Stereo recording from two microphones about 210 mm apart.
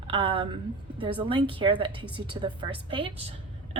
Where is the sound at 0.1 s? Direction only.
25° right (ahead or behind).